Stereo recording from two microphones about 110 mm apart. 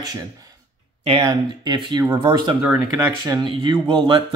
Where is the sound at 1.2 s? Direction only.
45° right (ahead or behind).